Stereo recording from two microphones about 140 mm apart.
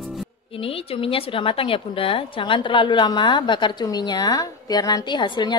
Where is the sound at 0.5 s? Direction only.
45° left (ahead or behind).